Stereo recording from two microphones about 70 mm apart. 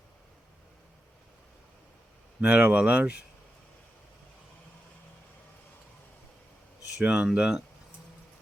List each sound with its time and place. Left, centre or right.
2.4 s speech: right
7.0 s speech: centre